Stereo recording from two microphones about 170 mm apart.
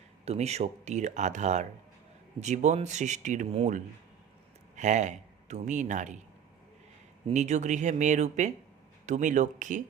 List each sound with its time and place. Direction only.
0.3 s a man's voice: 40° right (ahead or behind)
7.3 s speech: 45° right (ahead or behind)